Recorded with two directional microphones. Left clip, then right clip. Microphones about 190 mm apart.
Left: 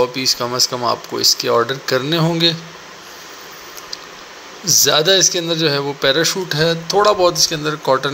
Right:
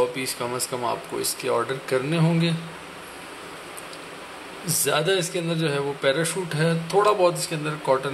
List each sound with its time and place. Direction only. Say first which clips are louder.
0.0 s speech: left 8 dB; 20° left (ahead or behind)
4.8 s speech: left 8 dB; 25° left (ahead or behind)